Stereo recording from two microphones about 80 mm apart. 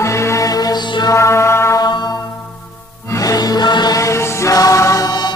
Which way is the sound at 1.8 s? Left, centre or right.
Left.